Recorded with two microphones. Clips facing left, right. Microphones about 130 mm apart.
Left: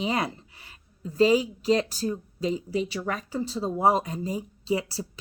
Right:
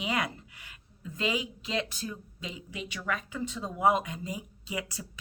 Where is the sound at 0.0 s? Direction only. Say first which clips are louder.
Left 4 dB; 35° left (ahead or behind).